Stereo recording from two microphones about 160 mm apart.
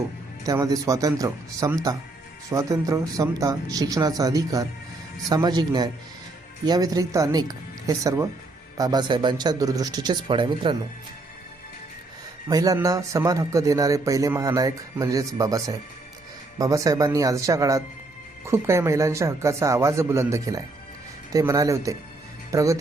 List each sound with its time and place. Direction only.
0.4 s speech: 20° right (ahead or behind)
12.5 s speech: 25° right (ahead or behind)